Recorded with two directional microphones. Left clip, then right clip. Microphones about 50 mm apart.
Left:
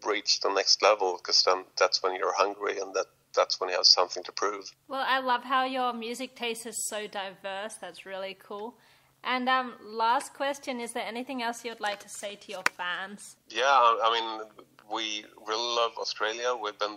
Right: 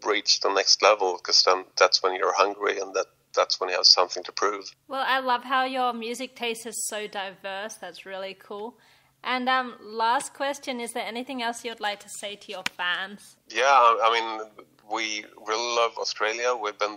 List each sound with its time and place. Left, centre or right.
0.0 s speech: centre
4.8 s a woman's voice: right
13.5 s a man's voice: right